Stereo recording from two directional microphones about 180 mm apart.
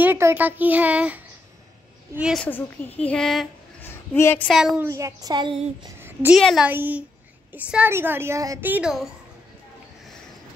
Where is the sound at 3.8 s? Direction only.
15° left (ahead or behind).